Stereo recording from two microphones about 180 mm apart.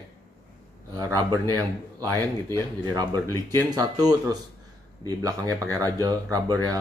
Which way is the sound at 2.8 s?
20° right (ahead or behind).